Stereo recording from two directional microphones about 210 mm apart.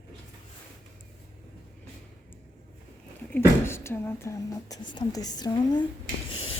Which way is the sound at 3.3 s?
10° left (ahead or behind).